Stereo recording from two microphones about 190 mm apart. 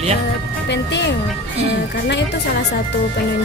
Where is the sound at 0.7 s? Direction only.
65° left (ahead or behind).